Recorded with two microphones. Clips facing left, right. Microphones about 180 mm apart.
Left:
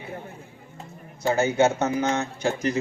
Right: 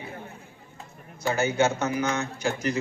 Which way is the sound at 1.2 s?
25° left (ahead or behind).